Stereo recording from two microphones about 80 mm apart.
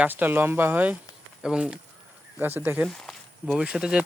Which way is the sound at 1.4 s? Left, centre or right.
Centre.